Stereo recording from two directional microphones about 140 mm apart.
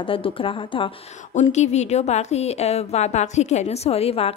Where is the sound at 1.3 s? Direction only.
55° left (ahead or behind).